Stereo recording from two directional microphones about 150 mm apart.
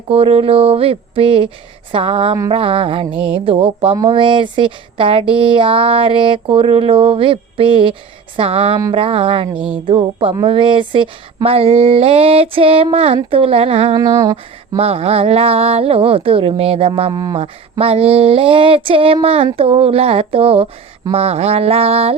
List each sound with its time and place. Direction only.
0.1 s speech: 40° right (ahead or behind)
13.9 s a sound: 25° right (ahead or behind)
14.8 s speech: 40° right (ahead or behind)
17.1 s a sound: 20° right (ahead or behind)
17.3 s speech: 40° right (ahead or behind)
21.1 s mantra: 45° right (ahead or behind)